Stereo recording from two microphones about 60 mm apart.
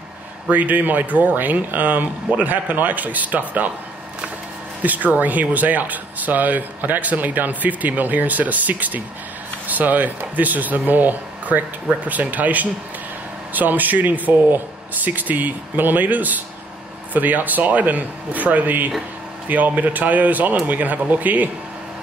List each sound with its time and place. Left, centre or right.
0.5 s speech: right
4.8 s speech: right